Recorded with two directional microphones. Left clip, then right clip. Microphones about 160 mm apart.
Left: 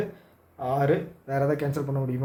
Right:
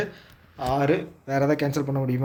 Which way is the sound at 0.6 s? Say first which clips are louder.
Right 1 dB; 35° right (ahead or behind).